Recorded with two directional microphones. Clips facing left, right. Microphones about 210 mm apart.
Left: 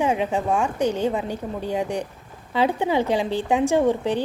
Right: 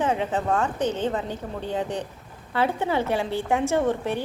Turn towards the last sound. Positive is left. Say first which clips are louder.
# left 3 dB
turn(degrees=15)  # may be behind; listen again after turning